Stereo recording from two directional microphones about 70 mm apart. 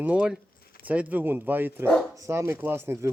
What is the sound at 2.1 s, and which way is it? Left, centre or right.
Speech, right.